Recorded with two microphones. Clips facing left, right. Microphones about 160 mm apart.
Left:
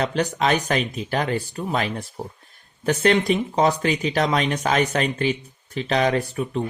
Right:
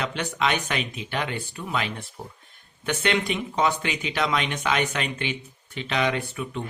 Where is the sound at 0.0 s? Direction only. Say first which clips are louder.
Left 5 dB; 40° left (ahead or behind).